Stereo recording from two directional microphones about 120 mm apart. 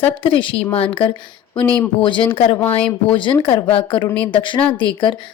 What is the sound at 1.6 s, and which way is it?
Speech, 10° left (ahead or behind).